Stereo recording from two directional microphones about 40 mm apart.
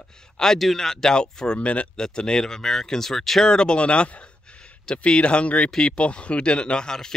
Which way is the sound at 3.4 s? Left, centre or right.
Centre.